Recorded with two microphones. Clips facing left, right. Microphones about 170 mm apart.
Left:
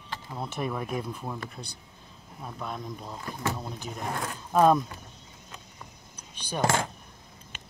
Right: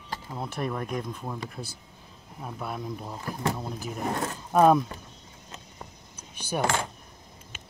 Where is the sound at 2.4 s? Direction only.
10° right (ahead or behind).